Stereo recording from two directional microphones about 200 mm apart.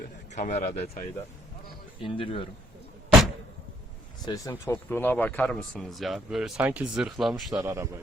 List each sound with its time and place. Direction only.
0.3 s a man's voice: 35° left (ahead or behind)
4.3 s speech: 15° left (ahead or behind); by 7.5 s centre (ahead or behind)
7.5 s a man's voice: 15° right (ahead or behind)